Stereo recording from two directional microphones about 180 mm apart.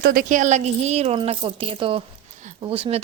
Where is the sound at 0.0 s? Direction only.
50° right (ahead or behind).